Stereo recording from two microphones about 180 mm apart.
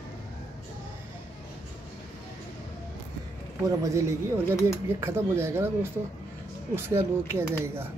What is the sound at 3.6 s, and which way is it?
Speech, 15° right (ahead or behind).